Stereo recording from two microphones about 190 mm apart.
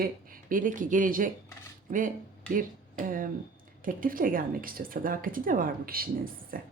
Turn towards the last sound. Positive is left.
turn(degrees=-50)  # may be behind; listen again after turning